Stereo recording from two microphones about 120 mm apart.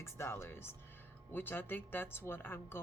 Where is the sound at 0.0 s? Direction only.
20° left (ahead or behind).